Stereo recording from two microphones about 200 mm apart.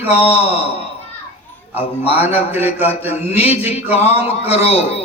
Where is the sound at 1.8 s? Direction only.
30° left (ahead or behind).